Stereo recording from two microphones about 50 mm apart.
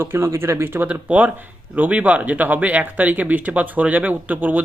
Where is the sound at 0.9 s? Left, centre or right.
Right.